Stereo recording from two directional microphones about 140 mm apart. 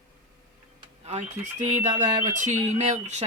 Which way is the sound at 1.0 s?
55° right (ahead or behind).